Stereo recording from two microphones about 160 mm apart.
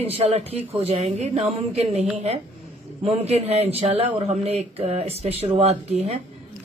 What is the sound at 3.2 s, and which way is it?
A man's voice, 40° right (ahead or behind).